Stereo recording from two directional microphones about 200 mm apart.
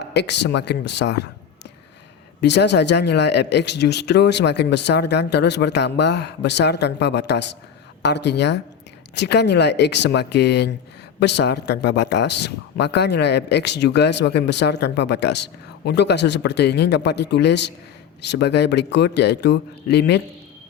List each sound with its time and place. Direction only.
0.1 s speech: 55° left (ahead or behind)
2.4 s speech: 60° left (ahead or behind)